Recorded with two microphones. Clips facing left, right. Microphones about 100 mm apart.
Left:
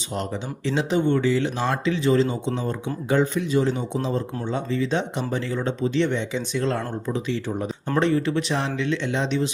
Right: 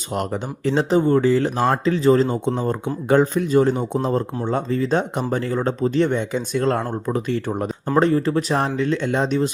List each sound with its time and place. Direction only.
0.1 s speech: 50° right (ahead or behind)
7.9 s speech: 40° right (ahead or behind)